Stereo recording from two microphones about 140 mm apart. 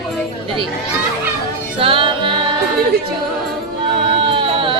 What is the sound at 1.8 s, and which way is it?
Music, 40° right (ahead or behind).